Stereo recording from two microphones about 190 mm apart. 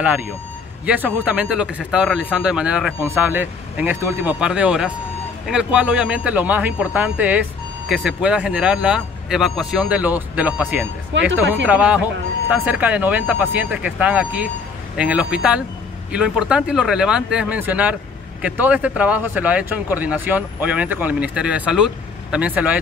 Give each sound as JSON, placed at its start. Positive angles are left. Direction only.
{"t": 0.8, "sound": "speech", "side_deg": -5}
{"t": 11.1, "sound": "speech", "side_deg": -75}
{"t": 11.6, "sound": "speech", "side_deg": -5}